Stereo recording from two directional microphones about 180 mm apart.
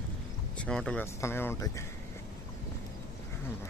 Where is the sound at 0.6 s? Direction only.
5° left (ahead or behind).